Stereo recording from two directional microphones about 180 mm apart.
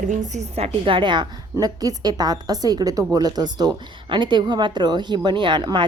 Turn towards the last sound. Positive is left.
turn(degrees=-25)  # may be behind; listen again after turning